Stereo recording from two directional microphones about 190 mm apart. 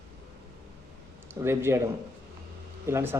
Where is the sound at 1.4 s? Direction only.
15° right (ahead or behind).